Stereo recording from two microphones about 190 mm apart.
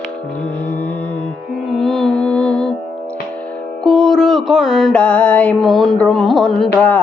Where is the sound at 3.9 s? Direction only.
Centre (ahead or behind).